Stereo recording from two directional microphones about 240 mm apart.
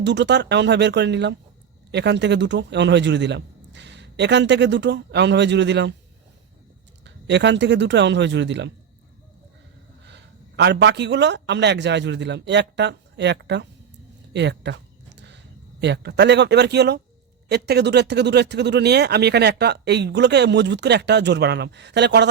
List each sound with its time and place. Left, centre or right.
0.0 s speech: right
7.0 s speech: right
10.6 s speech: right
14.3 s a sound: right
15.8 s speech: right